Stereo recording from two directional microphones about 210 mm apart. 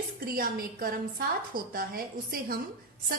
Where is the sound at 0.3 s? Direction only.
45° right (ahead or behind).